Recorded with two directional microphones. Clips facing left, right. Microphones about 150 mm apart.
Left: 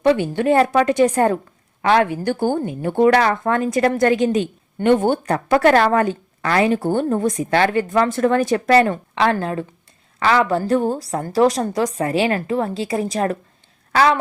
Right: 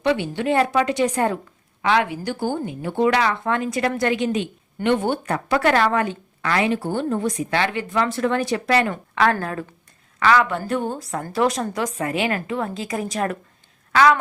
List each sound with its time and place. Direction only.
0.0 s a woman's voice: 45° left (ahead or behind)
8.9 s a woman's voice: 25° left (ahead or behind)